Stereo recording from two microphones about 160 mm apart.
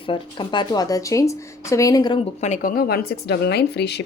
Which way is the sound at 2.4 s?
55° left (ahead or behind).